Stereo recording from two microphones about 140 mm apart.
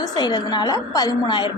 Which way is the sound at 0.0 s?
30° left (ahead or behind).